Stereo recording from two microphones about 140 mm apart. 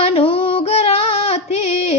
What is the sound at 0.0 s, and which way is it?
Female singing, 40° left (ahead or behind).